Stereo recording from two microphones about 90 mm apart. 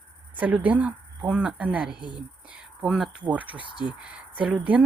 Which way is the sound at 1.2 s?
5° right (ahead or behind).